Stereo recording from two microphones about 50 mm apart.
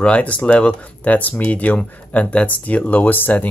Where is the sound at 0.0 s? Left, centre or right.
Left.